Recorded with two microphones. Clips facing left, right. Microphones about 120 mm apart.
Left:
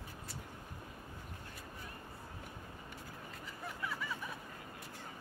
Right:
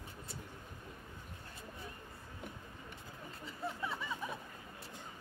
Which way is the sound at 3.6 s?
25° right (ahead or behind).